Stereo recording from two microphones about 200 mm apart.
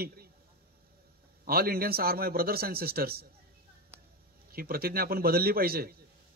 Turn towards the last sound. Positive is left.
turn(degrees=-50)  # may be behind; listen again after turning